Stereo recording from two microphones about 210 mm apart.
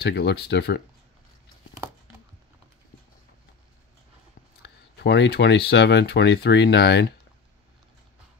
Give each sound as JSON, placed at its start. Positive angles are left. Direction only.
{"t": 0.0, "sound": "speech", "side_deg": 50}
{"t": 4.6, "sound": "speech", "side_deg": 55}